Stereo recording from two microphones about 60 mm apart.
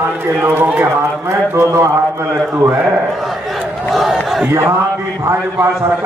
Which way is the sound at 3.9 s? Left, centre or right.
Centre.